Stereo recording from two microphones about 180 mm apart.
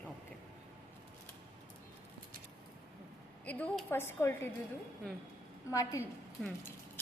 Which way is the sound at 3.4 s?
10° left (ahead or behind).